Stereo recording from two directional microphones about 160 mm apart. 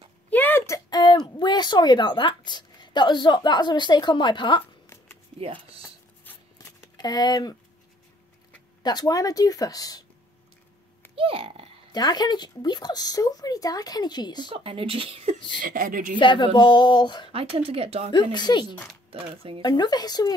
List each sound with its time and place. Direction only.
0.3 s a sound: 10° left (ahead or behind); by 4.9 s 30° left (ahead or behind)
5.4 s speech: 35° right (ahead or behind)
6.2 s a sound: 20° left (ahead or behind)
8.8 s speech: 25° left (ahead or behind)
11.1 s a child's voice: 35° right (ahead or behind)
11.9 s speech: 25° left (ahead or behind)
14.5 s speech: 35° right (ahead or behind)
15.6 s speech: 60° right (ahead or behind)
16.2 s speech: 30° left (ahead or behind)
17.3 s speech: 35° right (ahead or behind)
18.1 s speech: 30° left (ahead or behind)
19.0 s speech: 35° right (ahead or behind)
19.6 s speech: 25° left (ahead or behind)